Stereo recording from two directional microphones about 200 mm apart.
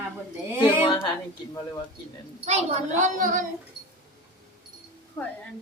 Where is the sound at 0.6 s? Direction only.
25° left (ahead or behind).